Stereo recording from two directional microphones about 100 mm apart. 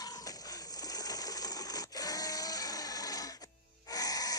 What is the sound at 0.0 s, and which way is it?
Sewing machine, 40° left (ahead or behind).